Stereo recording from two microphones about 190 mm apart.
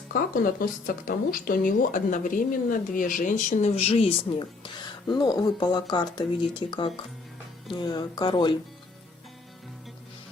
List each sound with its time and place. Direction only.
0.1 s speech: 50° left (ahead or behind); by 8.5 s 25° left (ahead or behind)